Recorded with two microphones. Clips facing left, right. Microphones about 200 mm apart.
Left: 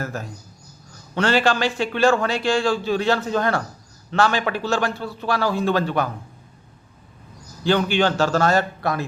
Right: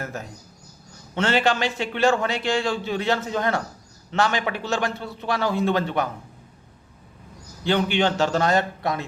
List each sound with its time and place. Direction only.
0.0 s a man's voice: 20° right (ahead or behind)
7.6 s a man's voice: 20° right (ahead or behind)